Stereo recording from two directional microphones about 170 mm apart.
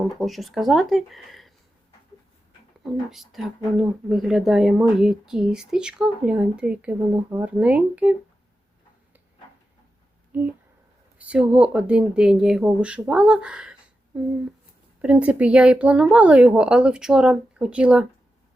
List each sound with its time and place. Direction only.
0.2 s speech: centre (ahead or behind)
2.8 s speech: centre (ahead or behind)
10.3 s speech: 10° right (ahead or behind)